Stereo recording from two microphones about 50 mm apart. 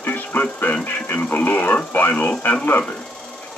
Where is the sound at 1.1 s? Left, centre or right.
Left.